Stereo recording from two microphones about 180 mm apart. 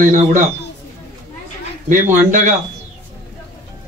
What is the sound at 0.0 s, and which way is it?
Speech, 45° right (ahead or behind).